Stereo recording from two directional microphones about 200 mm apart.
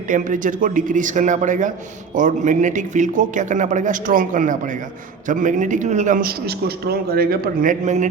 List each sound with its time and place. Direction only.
0.1 s a man's voice: 40° right (ahead or behind)